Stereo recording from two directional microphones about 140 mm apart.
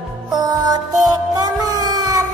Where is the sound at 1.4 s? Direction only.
30° right (ahead or behind).